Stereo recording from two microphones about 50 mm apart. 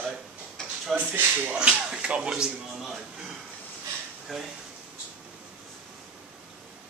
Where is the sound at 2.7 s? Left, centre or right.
Centre.